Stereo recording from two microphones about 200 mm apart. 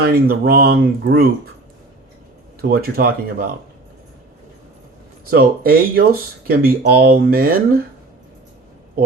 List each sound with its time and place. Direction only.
0.0 s speech: 50° right (ahead or behind)
2.6 s speech: 50° right (ahead or behind)
5.3 s speech: 45° right (ahead or behind)